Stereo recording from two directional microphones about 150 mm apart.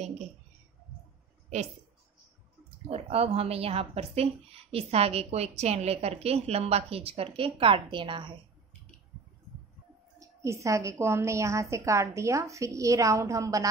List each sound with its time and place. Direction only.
2.9 s a woman's voice: 40° right (ahead or behind)
10.1 s a woman's voice: 20° right (ahead or behind)